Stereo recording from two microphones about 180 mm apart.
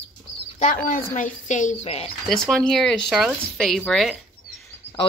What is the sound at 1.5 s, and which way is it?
Speech, 40° left (ahead or behind).